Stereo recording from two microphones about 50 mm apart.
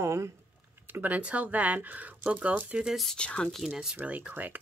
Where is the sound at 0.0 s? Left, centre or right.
Right.